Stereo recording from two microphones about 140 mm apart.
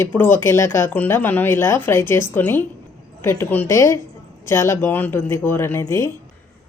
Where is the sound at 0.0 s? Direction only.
15° left (ahead or behind).